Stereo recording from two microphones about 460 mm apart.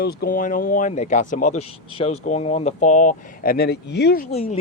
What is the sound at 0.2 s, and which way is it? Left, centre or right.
Speech, centre.